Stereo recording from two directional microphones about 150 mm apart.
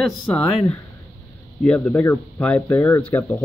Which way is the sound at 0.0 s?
10° left (ahead or behind).